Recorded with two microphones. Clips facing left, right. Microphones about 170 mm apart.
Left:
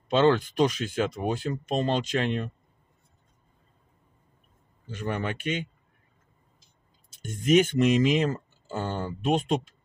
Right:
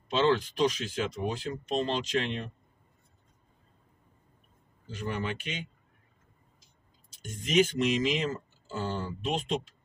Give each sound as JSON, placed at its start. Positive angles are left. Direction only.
{"t": 0.1, "sound": "speech", "side_deg": 60}
{"t": 4.9, "sound": "speech", "side_deg": 55}
{"t": 7.2, "sound": "speech", "side_deg": 50}